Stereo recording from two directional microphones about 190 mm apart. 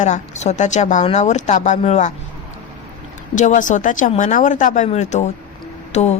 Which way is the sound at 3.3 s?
40° left (ahead or behind).